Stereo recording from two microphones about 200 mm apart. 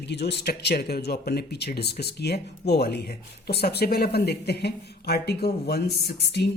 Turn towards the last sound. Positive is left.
turn(degrees=55)  # may be behind; listen again after turning